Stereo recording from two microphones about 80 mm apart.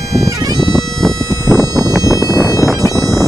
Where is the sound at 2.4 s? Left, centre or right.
Centre.